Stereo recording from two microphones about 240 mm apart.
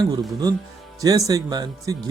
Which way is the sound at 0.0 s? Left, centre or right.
Centre.